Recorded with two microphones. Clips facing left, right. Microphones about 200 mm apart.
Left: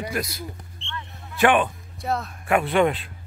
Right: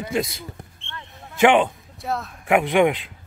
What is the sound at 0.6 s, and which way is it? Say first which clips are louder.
Basketball bounce: left 1 dB; 55° right (ahead or behind).